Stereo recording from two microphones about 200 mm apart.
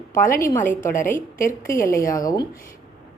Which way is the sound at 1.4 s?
45° left (ahead or behind).